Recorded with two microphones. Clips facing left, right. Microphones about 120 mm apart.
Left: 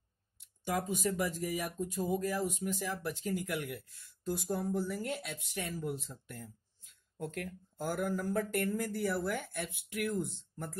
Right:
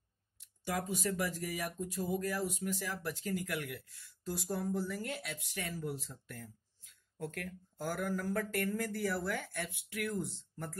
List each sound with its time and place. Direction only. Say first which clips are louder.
0.7 s speech: left 2 dB; 20° left (ahead or behind)